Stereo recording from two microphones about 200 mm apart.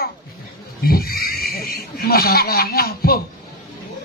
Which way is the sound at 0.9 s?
50° left (ahead or behind).